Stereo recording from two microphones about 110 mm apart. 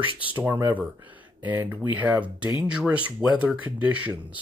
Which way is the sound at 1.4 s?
20° right (ahead or behind).